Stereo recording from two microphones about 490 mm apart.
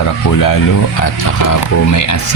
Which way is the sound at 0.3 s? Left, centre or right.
Left.